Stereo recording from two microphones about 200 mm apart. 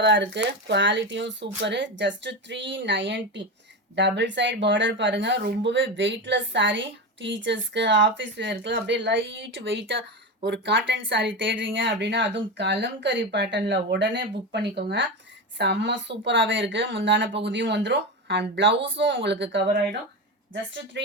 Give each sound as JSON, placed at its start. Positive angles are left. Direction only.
{"t": 0.0, "sound": "speech", "side_deg": -65}